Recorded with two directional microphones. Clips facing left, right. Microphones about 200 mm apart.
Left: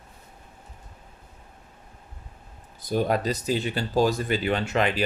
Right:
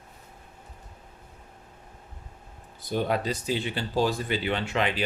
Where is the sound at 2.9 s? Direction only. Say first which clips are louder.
Left 3 dB; 40° left (ahead or behind).